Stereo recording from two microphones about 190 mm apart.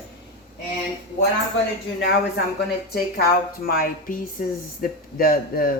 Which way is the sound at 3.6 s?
50° left (ahead or behind).